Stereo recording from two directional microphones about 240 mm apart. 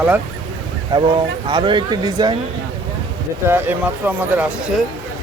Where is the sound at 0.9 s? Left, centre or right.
Centre.